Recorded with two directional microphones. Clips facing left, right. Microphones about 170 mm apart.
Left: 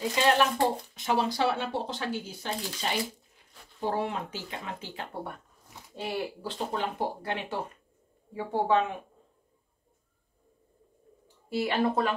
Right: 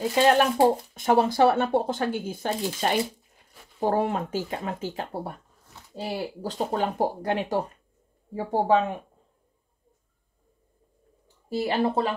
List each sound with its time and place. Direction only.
0.2 s speech: 45° right (ahead or behind)
11.4 s speech: 35° right (ahead or behind)